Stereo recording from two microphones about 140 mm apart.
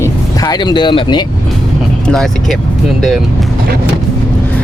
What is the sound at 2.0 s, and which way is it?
Speech, 5° left (ahead or behind).